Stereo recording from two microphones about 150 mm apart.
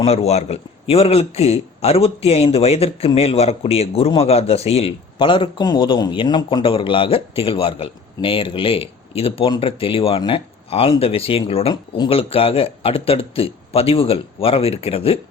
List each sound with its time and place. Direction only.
0.0 s a man's voice: 45° left (ahead or behind)